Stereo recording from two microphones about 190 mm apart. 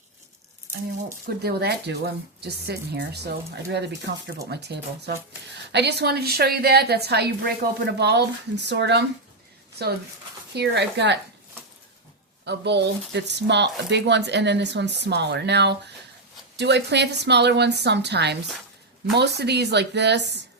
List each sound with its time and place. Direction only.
1.4 s a woman's voice: 55° right (ahead or behind)
12.5 s a woman's voice: 65° right (ahead or behind)